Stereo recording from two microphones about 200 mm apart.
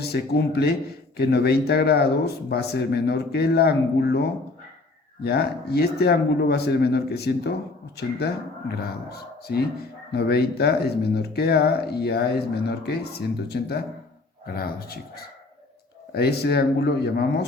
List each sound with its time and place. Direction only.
0.0 s speech: 55° left (ahead or behind)
8.8 s speech: 50° left (ahead or behind)